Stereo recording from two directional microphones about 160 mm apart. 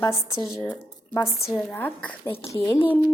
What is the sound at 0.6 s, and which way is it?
A woman's voice, 20° left (ahead or behind).